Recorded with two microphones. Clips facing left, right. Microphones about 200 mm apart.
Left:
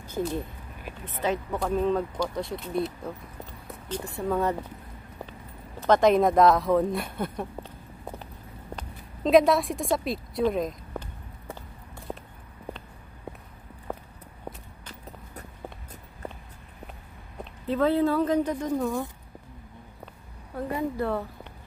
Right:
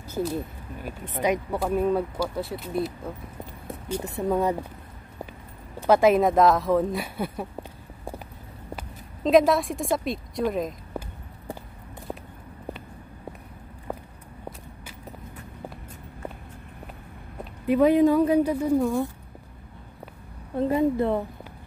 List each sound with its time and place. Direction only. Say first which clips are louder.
0.1 s speech: right 2 dB; 5° right (ahead or behind)
4.0 s speech: right 2 dB; 20° right (ahead or behind)
5.8 s speech: right 1 dB; 10° right (ahead or behind)
8.7 s a sound: right 2 dB; centre (ahead or behind)
10.4 s speech: left 1 dB; 5° right (ahead or behind)
13.9 s vehicle: right 1 dB; 5° right (ahead or behind)
17.6 s speech: right 5 dB; 15° right (ahead or behind)
20.5 s a woman's voice: right 7 dB; 25° right (ahead or behind)